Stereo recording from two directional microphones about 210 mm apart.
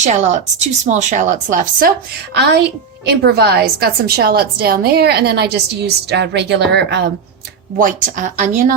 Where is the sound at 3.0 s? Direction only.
50° right (ahead or behind).